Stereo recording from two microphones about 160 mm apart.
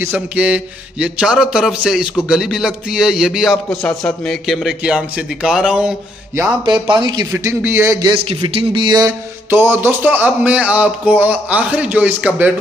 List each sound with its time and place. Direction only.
0.0 s a man's voice: 10° right (ahead or behind)
6.6 s speech: 30° right (ahead or behind)
7.3 s speech: 15° right (ahead or behind)
8.2 s speech: 35° right (ahead or behind); by 12.5 s 10° right (ahead or behind)